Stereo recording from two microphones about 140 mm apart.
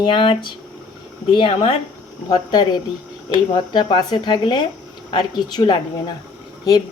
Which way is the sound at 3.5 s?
35° left (ahead or behind).